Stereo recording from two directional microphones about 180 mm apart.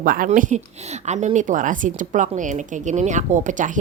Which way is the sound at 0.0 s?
50° right (ahead or behind).